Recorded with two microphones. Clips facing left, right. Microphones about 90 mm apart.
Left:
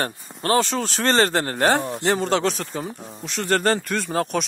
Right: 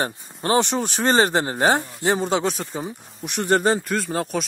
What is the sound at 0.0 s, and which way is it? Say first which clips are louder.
Speech: right 1 dB; 20° right (ahead or behind).